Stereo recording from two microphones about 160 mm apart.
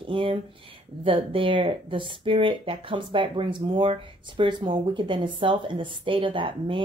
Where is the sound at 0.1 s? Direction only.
35° right (ahead or behind).